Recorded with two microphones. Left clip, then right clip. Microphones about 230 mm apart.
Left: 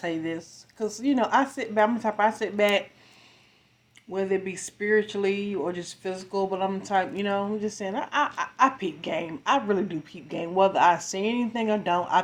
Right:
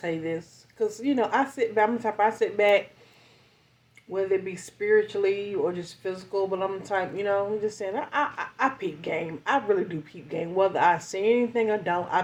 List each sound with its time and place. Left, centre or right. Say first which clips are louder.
0.0 s speech: even; left
4.1 s speech: right 1 dB; left